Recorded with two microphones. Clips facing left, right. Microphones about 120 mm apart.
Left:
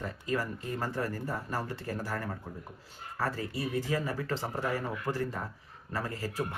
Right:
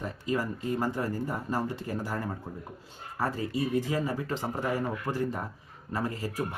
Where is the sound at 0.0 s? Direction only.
20° right (ahead or behind).